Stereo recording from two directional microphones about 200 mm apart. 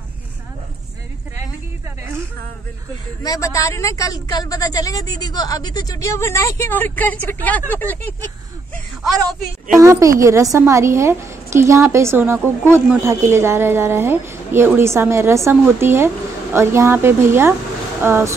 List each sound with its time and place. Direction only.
3.2 s a woman's voice: 15° left (ahead or behind)
9.8 s a woman's voice: 15° right (ahead or behind)